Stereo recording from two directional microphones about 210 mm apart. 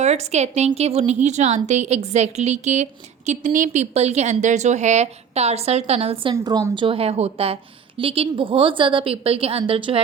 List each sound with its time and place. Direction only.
0.0 s a woman's voice: 30° right (ahead or behind)
6.3 s a woman's voice: 15° right (ahead or behind)